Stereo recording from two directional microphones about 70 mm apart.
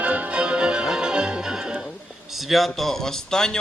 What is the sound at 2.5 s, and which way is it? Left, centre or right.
Speech, centre.